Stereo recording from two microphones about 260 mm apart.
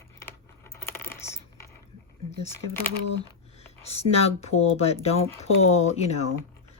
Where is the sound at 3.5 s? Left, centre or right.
Left.